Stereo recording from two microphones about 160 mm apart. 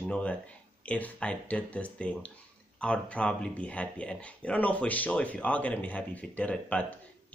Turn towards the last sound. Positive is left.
turn(degrees=10)  # may be behind; listen again after turning